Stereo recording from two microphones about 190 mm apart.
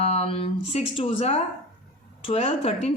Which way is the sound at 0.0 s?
30° left (ahead or behind).